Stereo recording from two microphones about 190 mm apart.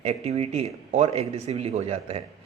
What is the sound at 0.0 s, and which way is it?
Speech, 35° right (ahead or behind).